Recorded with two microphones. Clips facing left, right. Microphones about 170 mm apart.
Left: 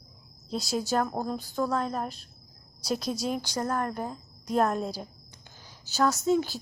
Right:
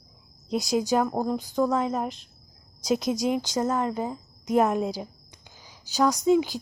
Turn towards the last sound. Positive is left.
turn(degrees=-15)  # may be behind; listen again after turning